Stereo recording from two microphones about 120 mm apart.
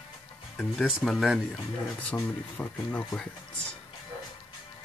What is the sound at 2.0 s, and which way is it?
Speech, 10° left (ahead or behind).